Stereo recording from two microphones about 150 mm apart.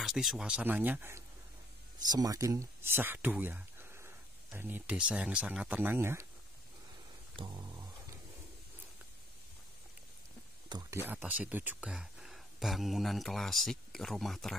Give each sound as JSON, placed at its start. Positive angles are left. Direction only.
{"t": 0.0, "sound": "speech", "side_deg": 0}
{"t": 2.0, "sound": "speech", "side_deg": -25}
{"t": 7.3, "sound": "a sound", "side_deg": -30}
{"t": 10.7, "sound": "speech", "side_deg": -25}
{"t": 11.1, "sound": "speech", "side_deg": -10}